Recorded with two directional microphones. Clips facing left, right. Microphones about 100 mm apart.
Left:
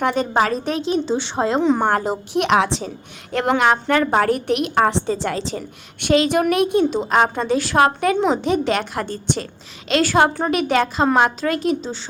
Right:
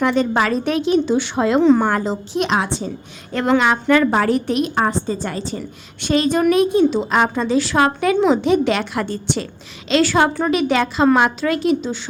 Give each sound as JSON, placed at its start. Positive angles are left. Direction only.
{"t": 0.0, "sound": "a woman's voice", "side_deg": 45}
{"t": 1.6, "sound": "a woman's voice", "side_deg": 15}
{"t": 1.9, "sound": "a woman's voice", "side_deg": 55}
{"t": 3.6, "sound": "a woman's voice", "side_deg": 50}
{"t": 7.1, "sound": "a woman's voice", "side_deg": 50}
{"t": 8.3, "sound": "a woman's voice", "side_deg": 40}